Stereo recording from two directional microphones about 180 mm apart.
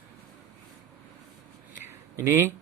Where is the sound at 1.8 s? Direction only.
15° right (ahead or behind).